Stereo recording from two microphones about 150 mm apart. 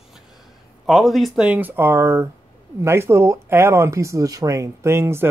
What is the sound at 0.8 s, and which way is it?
Speech, centre (ahead or behind).